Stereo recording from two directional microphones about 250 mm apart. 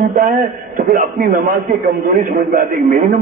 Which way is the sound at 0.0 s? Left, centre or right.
Right.